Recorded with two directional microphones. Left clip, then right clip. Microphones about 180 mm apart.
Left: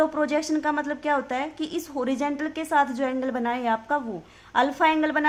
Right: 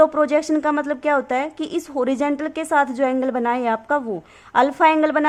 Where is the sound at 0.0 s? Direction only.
30° right (ahead or behind).